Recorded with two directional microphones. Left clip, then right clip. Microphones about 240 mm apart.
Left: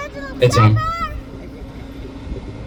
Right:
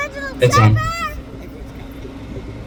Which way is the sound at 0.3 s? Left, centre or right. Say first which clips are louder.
Right 1 dB; centre.